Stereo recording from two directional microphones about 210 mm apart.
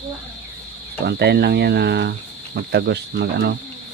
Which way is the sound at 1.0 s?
50° right (ahead or behind).